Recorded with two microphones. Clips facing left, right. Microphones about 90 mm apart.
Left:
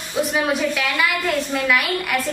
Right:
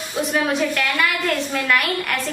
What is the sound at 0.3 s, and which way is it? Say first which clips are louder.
A woman's voice: right 2 dB; 5° left (ahead or behind).